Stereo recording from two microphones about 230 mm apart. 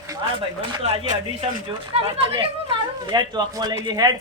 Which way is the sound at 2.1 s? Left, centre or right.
Right.